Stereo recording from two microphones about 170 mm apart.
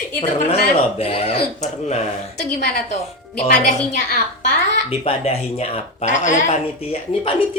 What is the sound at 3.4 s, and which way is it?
Speech, 45° left (ahead or behind).